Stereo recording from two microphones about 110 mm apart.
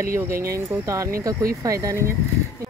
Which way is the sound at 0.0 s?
25° right (ahead or behind).